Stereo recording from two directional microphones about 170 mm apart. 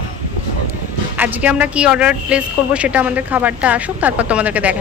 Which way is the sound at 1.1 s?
10° right (ahead or behind).